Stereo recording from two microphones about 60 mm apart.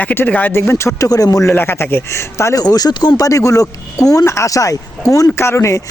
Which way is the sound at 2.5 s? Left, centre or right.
Left.